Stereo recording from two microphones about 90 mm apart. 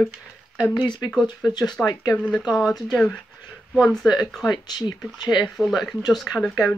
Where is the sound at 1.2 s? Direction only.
50° left (ahead or behind).